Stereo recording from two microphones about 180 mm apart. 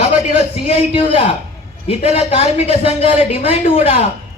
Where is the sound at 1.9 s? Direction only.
35° left (ahead or behind).